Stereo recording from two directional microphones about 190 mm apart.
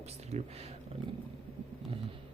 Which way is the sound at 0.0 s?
35° right (ahead or behind).